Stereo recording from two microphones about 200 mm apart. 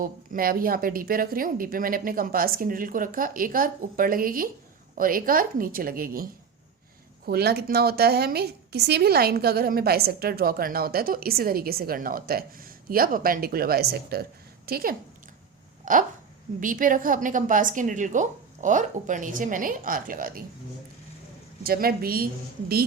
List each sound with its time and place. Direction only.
0.0 s a woman's voice: 45° right (ahead or behind)
7.3 s a woman's voice: 50° right (ahead or behind)
15.8 s a sound: 40° right (ahead or behind)
16.6 s a woman's voice: 40° right (ahead or behind)
21.6 s a woman's voice: 50° right (ahead or behind)